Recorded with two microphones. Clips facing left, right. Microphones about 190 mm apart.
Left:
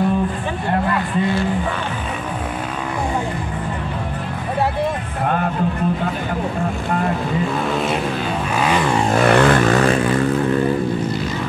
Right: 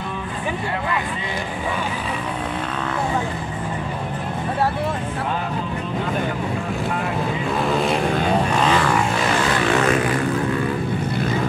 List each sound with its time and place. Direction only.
7.6 s vehicle: centre (ahead or behind)
9.1 s vehicle: 60° left (ahead or behind); by 9.9 s 40° left (ahead or behind)